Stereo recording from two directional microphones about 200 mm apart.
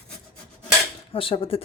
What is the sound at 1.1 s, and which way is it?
Speech, 25° left (ahead or behind).